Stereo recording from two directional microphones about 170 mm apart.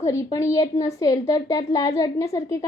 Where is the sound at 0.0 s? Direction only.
15° left (ahead or behind).